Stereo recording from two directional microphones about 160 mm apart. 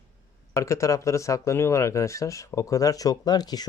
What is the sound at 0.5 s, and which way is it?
Speech, 20° left (ahead or behind).